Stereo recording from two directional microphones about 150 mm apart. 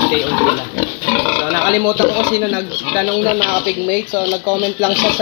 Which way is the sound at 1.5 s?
20° right (ahead or behind).